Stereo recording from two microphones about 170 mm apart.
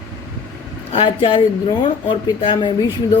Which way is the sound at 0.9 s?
30° left (ahead or behind).